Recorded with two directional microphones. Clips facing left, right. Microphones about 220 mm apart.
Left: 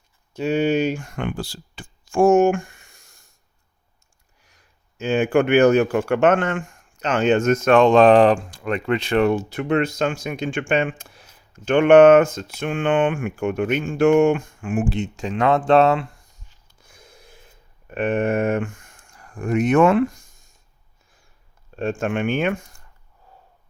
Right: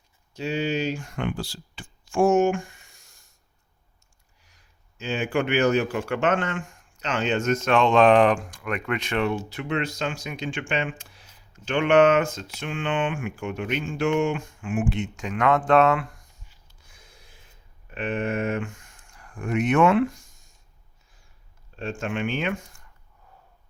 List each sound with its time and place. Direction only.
0.3 s speech: 55° left (ahead or behind)
4.9 s speech: 50° left (ahead or behind); by 16.0 s 30° left (ahead or behind)
16.8 s a sound: 50° left (ahead or behind)
17.8 s speech: 50° left (ahead or behind)
21.8 s speech: 55° left (ahead or behind)